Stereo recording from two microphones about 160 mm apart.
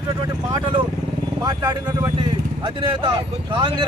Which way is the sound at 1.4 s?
25° right (ahead or behind).